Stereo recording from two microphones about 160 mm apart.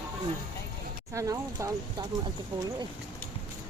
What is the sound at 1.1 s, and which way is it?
Speech, 20° right (ahead or behind).